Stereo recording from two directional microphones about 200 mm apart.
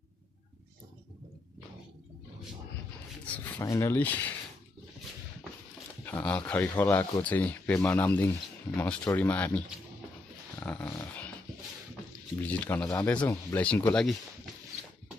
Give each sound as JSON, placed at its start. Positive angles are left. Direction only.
{"t": 3.5, "sound": "speech", "side_deg": 15}
{"t": 6.0, "sound": "speech", "side_deg": 10}
{"t": 10.6, "sound": "dog", "side_deg": 10}
{"t": 12.4, "sound": "speech", "side_deg": 10}